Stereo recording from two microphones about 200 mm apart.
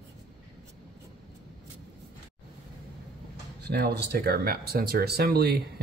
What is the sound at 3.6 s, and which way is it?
Speech, 55° right (ahead or behind).